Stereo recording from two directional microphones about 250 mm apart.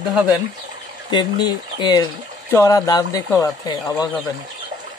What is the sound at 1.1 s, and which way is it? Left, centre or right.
Speech, centre.